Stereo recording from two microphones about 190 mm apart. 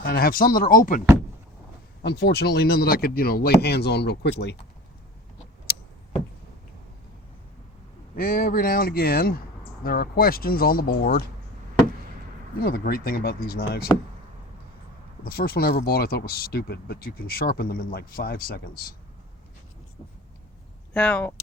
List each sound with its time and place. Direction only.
0.0 s speech: 55° left (ahead or behind)
2.0 s speech: 55° left (ahead or behind)
8.1 s speech: 50° left (ahead or behind)
12.5 s speech: 50° left (ahead or behind)
15.2 s speech: 50° left (ahead or behind)
20.9 s speech: 5° left (ahead or behind)